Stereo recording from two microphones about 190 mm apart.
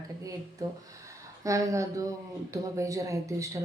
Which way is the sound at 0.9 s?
15° right (ahead or behind).